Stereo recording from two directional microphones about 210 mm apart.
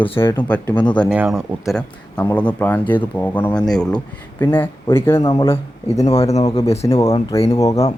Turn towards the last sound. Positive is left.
turn(degrees=15)  # may be behind; listen again after turning